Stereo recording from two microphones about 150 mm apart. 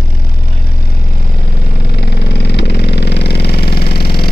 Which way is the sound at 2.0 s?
90° left.